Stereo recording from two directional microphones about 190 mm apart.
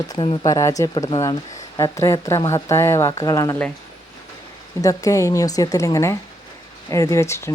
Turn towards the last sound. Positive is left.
turn(degrees=15)  # may be behind; listen again after turning